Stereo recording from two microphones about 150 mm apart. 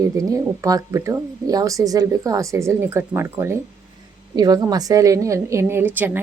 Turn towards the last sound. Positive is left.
turn(degrees=-15)  # may be behind; listen again after turning